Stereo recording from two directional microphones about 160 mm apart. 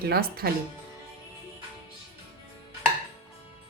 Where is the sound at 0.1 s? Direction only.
75° right (ahead or behind).